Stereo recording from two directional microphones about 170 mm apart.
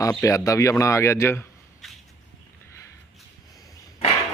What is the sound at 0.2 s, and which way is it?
A man's voice, 20° left (ahead or behind).